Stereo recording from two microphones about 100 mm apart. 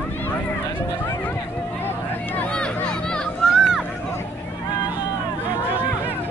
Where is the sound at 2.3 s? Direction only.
10° left (ahead or behind).